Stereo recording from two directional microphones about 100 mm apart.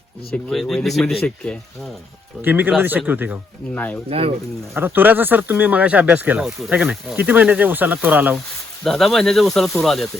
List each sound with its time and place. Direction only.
0.5 s speech: 5° left (ahead or behind)
2.4 s speech: 20° right (ahead or behind)
4.1 s speech: 90° right
4.7 s speech: 20° right (ahead or behind)
8.8 s speech: 5° left (ahead or behind)